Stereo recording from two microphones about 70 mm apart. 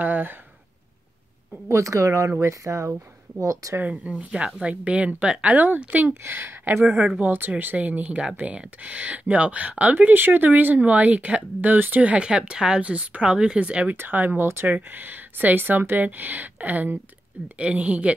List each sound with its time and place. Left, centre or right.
0.0 s speech: right
1.7 s speech: right
3.9 s speech: centre
7.0 s speech: centre
7.2 s speech: right